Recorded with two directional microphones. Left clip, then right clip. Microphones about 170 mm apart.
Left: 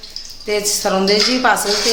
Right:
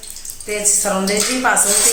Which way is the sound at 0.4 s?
65° left (ahead or behind).